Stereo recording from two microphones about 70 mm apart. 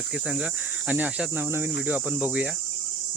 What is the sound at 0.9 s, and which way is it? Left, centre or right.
Speech, right.